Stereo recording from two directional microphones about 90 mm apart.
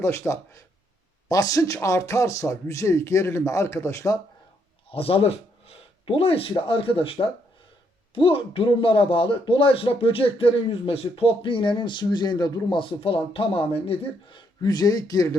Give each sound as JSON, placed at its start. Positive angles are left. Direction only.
{"t": 0.0, "sound": "speech", "side_deg": 35}
{"t": 4.9, "sound": "speech", "side_deg": 90}
{"t": 12.7, "sound": "speech", "side_deg": 70}
{"t": 14.6, "sound": "speech", "side_deg": 50}